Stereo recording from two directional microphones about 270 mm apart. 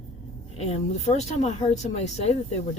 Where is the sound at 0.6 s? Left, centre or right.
Left.